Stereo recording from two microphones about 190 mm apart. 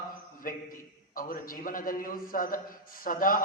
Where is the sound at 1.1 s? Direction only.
45° left (ahead or behind).